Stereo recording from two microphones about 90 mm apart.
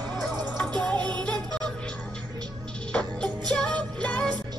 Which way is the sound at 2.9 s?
10° left (ahead or behind).